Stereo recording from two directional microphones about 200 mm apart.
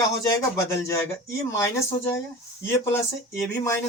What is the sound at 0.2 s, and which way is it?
Speech, 15° left (ahead or behind).